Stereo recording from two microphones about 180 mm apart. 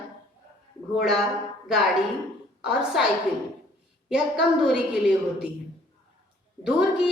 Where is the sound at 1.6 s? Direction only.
Centre (ahead or behind).